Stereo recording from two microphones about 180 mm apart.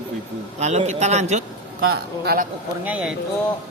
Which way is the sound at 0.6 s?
40° right (ahead or behind).